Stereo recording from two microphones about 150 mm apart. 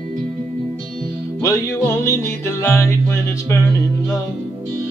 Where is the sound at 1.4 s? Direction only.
20° left (ahead or behind).